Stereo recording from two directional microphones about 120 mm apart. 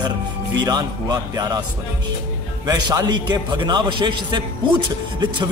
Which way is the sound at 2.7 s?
30° right (ahead or behind).